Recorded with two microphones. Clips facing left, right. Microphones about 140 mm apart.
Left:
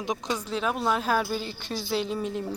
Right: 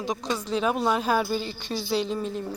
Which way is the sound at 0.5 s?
Centre (ahead or behind).